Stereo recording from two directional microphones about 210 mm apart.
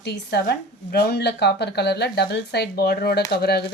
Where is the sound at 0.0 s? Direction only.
55° left (ahead or behind).